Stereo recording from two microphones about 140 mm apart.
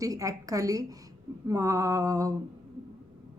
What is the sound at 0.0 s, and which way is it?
Speech, 25° right (ahead or behind).